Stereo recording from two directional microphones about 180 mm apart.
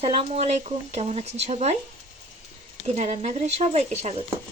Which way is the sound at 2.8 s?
40° right (ahead or behind).